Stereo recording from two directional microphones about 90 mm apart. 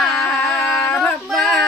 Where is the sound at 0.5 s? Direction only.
20° left (ahead or behind).